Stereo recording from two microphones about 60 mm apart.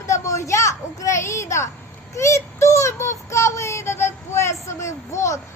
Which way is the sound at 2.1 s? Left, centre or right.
Left.